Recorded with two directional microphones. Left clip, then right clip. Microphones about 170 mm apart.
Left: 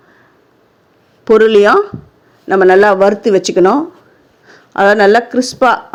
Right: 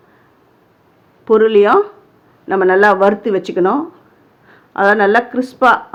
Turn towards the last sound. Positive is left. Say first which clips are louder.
# left 1 dB
turn(degrees=35)  # may be behind; listen again after turning